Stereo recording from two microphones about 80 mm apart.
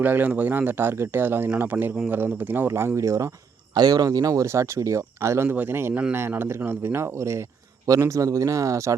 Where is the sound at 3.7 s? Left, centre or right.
Right.